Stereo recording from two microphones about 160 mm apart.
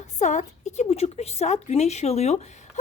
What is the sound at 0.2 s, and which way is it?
A woman's voice, 50° left (ahead or behind).